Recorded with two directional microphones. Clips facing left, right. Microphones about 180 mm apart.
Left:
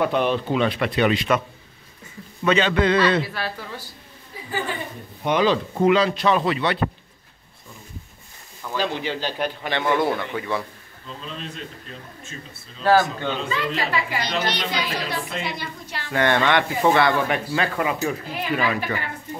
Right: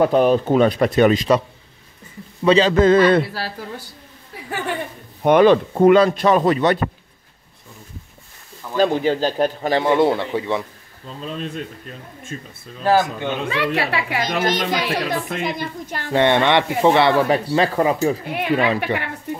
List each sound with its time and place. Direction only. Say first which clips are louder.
0.0 s speech: right 6 dB; 40° right (ahead or behind)
2.4 s speech: right 6 dB; 35° right (ahead or behind); by 3.3 s 50° right (ahead or behind)
5.2 s speech: right 8 dB; 55° right (ahead or behind)
8.7 s speech: right 8 dB; 45° right (ahead or behind); by 10.6 s 25° right (ahead or behind)
11.1 s speech: right 7 dB; 45° right (ahead or behind)
12.8 s speech: right 1 dB; 15° right (ahead or behind)
13.5 s a woman's voice: right 4 dB; 65° right (ahead or behind)
14.2 s speech: right 5 dB; 45° right (ahead or behind)
16.1 s speech: right 4 dB; 25° right (ahead or behind)
18.3 s a woman's voice: right 5 dB; 65° right (ahead or behind)
18.9 s speech: right 5 dB; 30° right (ahead or behind)